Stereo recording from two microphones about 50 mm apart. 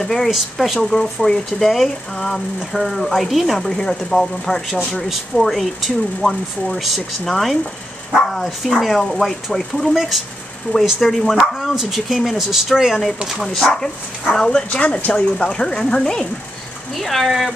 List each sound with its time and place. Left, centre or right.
0.0 s speech: centre
0.8 s speech: centre
3.5 s speech: centre
13.4 s speech: centre
14.5 s speech: left
15.1 s speech: centre